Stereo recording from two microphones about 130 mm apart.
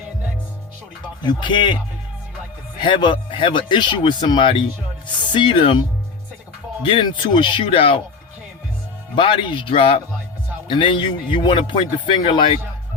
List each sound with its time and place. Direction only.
1.2 s speech: 35° left (ahead or behind)
2.8 s speech: 35° left (ahead or behind)
6.8 s speech: 40° left (ahead or behind)
9.1 s speech: 40° left (ahead or behind)